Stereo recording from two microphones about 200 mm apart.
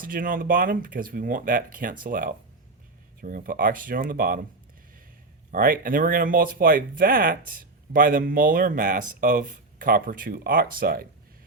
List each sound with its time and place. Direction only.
0.0 s speech: 45° right (ahead or behind)
5.5 s speech: 45° right (ahead or behind)